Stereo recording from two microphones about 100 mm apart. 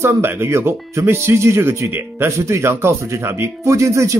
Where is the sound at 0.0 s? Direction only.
25° right (ahead or behind).